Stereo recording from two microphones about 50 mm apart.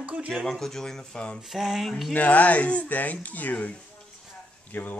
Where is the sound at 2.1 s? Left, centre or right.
Left.